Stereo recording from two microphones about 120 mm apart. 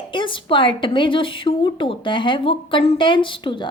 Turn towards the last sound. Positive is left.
turn(degrees=40)  # may be behind; listen again after turning